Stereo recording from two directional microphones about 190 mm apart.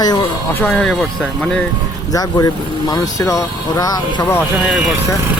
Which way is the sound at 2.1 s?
20° left (ahead or behind).